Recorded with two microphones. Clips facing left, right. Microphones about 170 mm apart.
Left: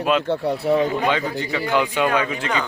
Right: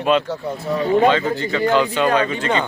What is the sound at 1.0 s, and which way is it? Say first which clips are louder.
Speech: right 5 dB; 15° left (ahead or behind).